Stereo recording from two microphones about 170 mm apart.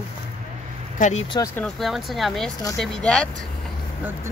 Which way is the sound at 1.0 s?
45° left (ahead or behind).